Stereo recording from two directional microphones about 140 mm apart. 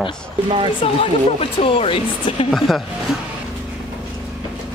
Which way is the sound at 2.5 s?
Centre (ahead or behind).